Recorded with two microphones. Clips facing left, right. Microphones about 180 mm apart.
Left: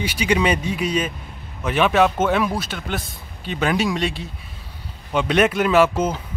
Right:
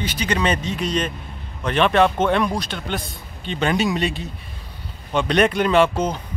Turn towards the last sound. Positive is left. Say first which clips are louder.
# left 1 dB
turn(degrees=5)  # may be behind; listen again after turning